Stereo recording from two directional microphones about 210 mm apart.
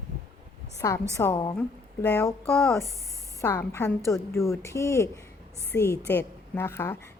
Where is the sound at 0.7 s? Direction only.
15° left (ahead or behind).